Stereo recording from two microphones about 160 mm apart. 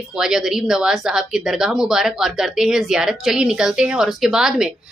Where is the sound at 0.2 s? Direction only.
5° right (ahead or behind).